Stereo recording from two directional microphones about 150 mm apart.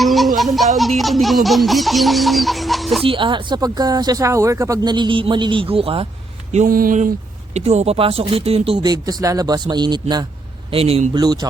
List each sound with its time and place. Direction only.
0.0 s baby laughter: centre (ahead or behind)
3.1 s speech: 35° right (ahead or behind)
6.7 s speech: 70° right (ahead or behind)
7.5 s speech: 45° right (ahead or behind); by 10.2 s 30° right (ahead or behind)
10.7 s speech: 40° right (ahead or behind)
11.1 s a man's voice: 25° right (ahead or behind)